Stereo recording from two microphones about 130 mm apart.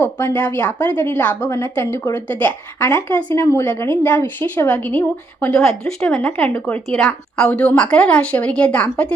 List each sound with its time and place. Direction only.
0.0 s a woman's voice: 15° left (ahead or behind)